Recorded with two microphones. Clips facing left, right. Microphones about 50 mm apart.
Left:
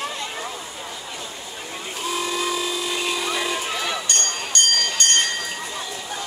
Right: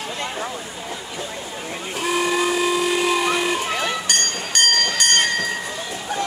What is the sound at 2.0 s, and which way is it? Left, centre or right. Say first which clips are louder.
Steam whistle: right 5 dB; right.